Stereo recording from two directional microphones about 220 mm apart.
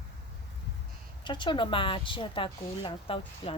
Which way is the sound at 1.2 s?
20° left (ahead or behind).